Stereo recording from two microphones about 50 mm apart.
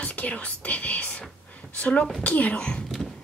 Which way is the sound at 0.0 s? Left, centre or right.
Left.